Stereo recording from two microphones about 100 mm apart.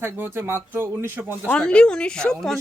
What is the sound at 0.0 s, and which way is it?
Speech, 20° right (ahead or behind).